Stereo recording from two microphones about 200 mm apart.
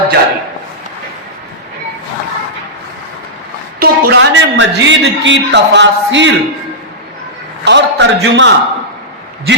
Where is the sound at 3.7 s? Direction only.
50° right (ahead or behind).